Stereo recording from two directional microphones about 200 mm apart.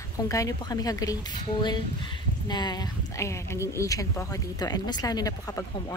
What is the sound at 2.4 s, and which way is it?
A woman's voice, 20° left (ahead or behind).